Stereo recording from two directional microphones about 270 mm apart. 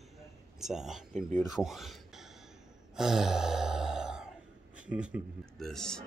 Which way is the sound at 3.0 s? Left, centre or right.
Centre.